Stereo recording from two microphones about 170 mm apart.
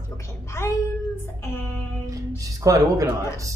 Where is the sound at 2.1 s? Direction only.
20° right (ahead or behind).